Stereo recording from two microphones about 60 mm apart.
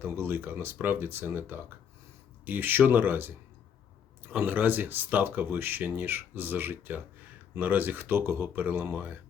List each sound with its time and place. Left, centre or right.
0.0 s speech: right